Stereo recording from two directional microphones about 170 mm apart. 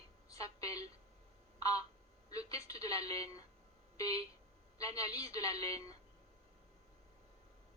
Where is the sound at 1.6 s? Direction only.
20° left (ahead or behind).